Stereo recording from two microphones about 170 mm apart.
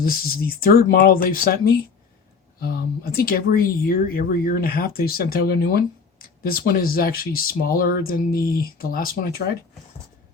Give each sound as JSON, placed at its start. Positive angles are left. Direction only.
{"t": 0.0, "sound": "speech", "side_deg": 60}
{"t": 2.6, "sound": "speech", "side_deg": 65}